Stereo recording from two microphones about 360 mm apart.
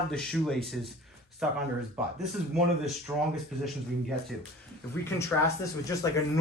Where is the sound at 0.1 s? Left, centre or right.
Centre.